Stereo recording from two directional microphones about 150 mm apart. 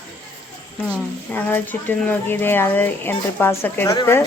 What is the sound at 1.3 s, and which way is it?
Speech, 15° left (ahead or behind).